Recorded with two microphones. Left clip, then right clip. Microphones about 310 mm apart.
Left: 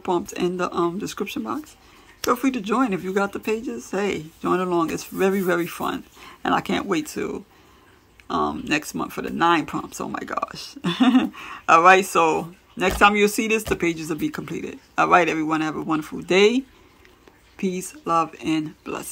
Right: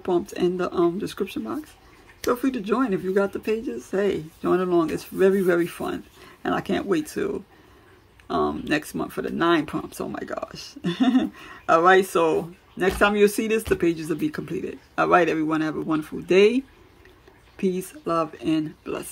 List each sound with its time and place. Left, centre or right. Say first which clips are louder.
0.0 s speech: even; centre